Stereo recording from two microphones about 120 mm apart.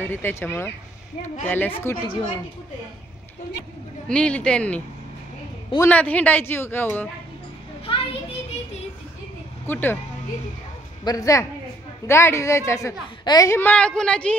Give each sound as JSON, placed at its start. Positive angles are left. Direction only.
{"t": 0.0, "sound": "a man's voice", "side_deg": 15}
{"t": 4.1, "sound": "a man's voice", "side_deg": 10}
{"t": 7.9, "sound": "children playing", "side_deg": 45}
{"t": 9.7, "sound": "a man's voice", "side_deg": 15}
{"t": 11.1, "sound": "a man's voice", "side_deg": 30}
{"t": 13.2, "sound": "a woman's voice", "side_deg": 35}
{"t": 13.5, "sound": "a man's voice", "side_deg": 15}